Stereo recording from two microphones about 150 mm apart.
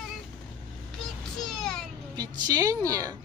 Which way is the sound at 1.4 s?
5° left (ahead or behind).